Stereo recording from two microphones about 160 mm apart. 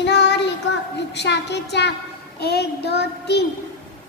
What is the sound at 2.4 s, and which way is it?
Child singing, 90° left.